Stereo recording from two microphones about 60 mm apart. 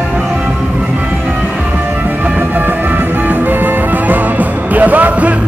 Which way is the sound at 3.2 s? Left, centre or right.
Right.